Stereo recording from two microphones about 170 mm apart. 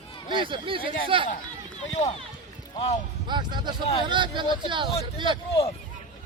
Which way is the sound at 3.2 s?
25° right (ahead or behind).